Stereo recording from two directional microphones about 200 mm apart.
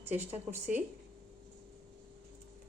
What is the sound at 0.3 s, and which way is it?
Speech, 10° right (ahead or behind).